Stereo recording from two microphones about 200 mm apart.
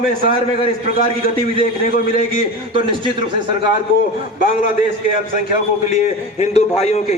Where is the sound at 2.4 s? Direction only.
25° right (ahead or behind).